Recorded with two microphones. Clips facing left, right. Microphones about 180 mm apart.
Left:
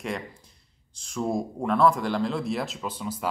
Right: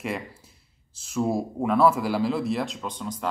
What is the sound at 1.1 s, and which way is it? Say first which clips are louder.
Speech: right 2 dB; 5° right (ahead or behind).